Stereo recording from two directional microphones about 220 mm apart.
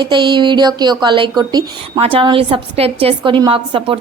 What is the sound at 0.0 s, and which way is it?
A woman's voice, 20° right (ahead or behind).